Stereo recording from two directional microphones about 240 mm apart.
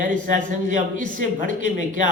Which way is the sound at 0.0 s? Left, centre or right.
Right.